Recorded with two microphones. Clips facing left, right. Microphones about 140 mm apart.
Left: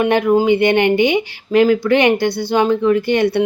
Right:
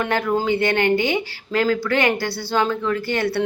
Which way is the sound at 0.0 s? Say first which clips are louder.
Left 7 dB; 20° left (ahead or behind).